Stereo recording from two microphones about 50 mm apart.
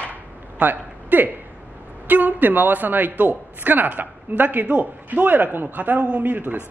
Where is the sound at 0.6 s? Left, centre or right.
Right.